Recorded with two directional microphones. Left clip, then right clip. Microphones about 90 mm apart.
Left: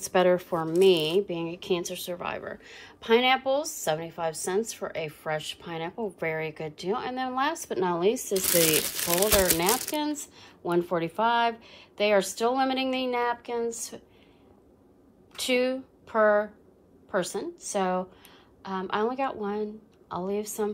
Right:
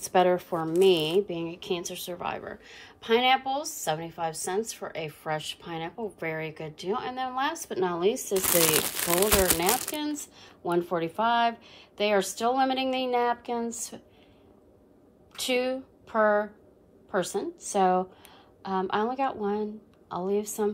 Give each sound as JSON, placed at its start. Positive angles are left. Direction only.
{"t": 0.0, "sound": "a woman's voice", "side_deg": -25}
{"t": 2.5, "sound": "a woman's voice", "side_deg": -20}
{"t": 9.6, "sound": "a woman's voice", "side_deg": -20}
{"t": 15.3, "sound": "speech", "side_deg": -30}